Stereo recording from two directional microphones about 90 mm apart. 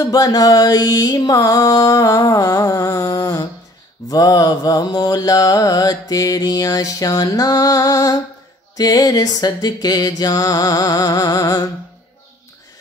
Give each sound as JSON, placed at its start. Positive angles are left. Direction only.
{"t": 0.0, "sound": "music", "side_deg": 40}
{"t": 4.1, "sound": "mantra", "side_deg": 45}